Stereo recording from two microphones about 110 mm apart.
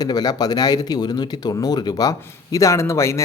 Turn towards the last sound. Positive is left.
turn(degrees=25)  # may be behind; listen again after turning